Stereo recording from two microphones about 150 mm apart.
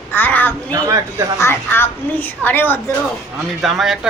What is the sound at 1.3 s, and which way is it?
A woman's voice, 15° left (ahead or behind).